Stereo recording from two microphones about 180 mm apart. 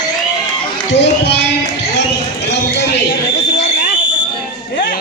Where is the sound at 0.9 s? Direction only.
75° left (ahead or behind).